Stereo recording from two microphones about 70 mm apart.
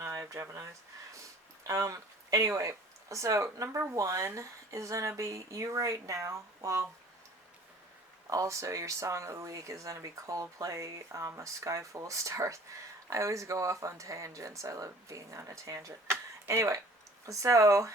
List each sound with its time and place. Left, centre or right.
0.0 s a sound: right
1.1 s speech: right
8.3 s speech: right